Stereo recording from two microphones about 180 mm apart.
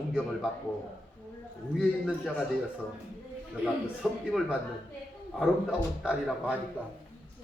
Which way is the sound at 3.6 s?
5° right (ahead or behind).